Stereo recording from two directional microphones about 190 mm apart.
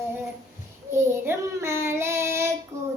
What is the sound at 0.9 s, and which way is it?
Child singing, 15° right (ahead or behind).